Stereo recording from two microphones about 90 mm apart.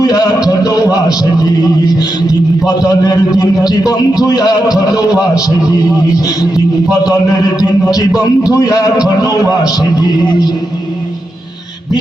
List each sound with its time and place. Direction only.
0.0 s a man's voice: 45° left (ahead or behind)
0.4 s a sound: 45° left (ahead or behind)
2.6 s a man's voice: 50° left (ahead or behind)
7.9 s a man's voice: 45° left (ahead or behind)